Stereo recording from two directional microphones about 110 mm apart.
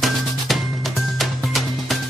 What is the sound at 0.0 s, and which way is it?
Music, centre (ahead or behind).